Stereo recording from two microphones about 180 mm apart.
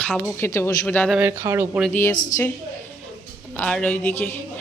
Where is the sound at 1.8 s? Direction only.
10° left (ahead or behind).